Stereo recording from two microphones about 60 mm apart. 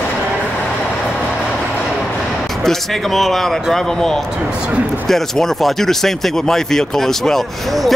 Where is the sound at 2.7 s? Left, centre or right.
Centre.